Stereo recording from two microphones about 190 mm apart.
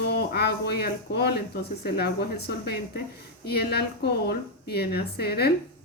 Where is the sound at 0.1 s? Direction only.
60° left (ahead or behind).